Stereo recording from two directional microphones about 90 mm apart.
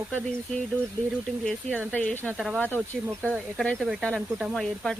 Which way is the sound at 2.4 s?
Centre (ahead or behind).